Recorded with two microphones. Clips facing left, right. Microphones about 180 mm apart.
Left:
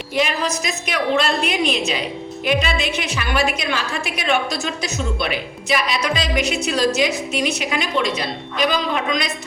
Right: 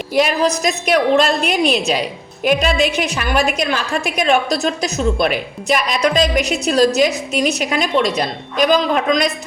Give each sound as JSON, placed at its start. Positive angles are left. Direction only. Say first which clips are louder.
{"t": 0.1, "sound": "a woman's voice", "louder": "right 6 dB", "side_deg": -40}